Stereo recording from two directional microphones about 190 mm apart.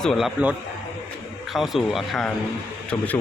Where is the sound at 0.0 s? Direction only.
Centre (ahead or behind).